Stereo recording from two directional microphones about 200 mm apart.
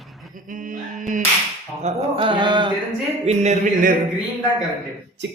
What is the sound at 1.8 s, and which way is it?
Music, 25° right (ahead or behind).